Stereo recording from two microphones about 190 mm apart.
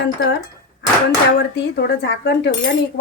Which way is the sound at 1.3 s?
60° left (ahead or behind).